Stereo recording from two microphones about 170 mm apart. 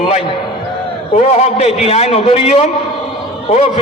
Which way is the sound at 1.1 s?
40° left (ahead or behind).